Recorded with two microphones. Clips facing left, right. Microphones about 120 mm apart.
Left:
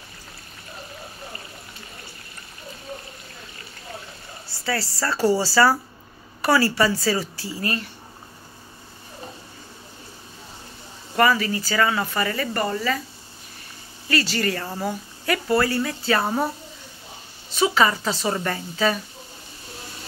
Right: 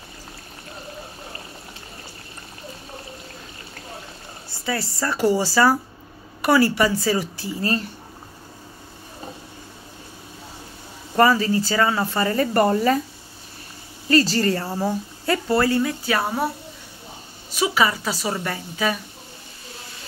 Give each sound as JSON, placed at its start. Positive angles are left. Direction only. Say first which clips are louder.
{"t": 4.5, "sound": "a woman's voice", "louder": "even", "side_deg": -20}
{"t": 11.1, "sound": "speech", "louder": "right 3 dB", "side_deg": -30}
{"t": 12.4, "sound": "speech", "louder": "right 7 dB", "side_deg": -45}
{"t": 14.0, "sound": "speech", "louder": "right 5 dB", "side_deg": -35}
{"t": 14.6, "sound": "a woman's voice", "louder": "right 4 dB", "side_deg": -10}
{"t": 14.9, "sound": "speech", "louder": "right 1 dB", "side_deg": -25}
{"t": 17.5, "sound": "a woman's voice", "louder": "left 1 dB", "side_deg": -10}